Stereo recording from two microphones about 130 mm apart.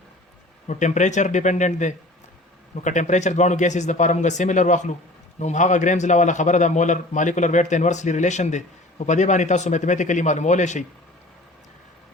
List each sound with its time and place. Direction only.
0.7 s a man's voice: 65° left (ahead or behind)